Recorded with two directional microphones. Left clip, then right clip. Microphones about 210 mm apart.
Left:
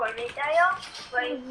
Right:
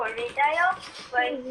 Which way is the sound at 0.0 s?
20° right (ahead or behind).